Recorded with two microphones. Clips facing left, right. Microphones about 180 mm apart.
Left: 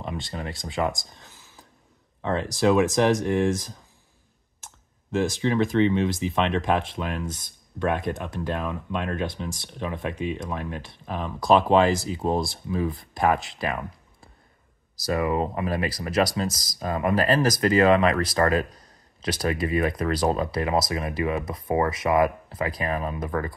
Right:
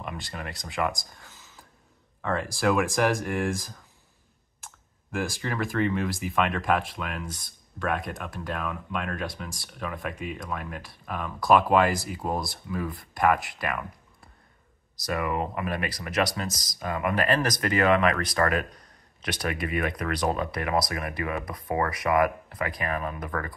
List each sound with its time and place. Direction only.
0.0 s speech: 25° left (ahead or behind)
5.1 s speech: 25° left (ahead or behind)
15.0 s speech: 30° left (ahead or behind)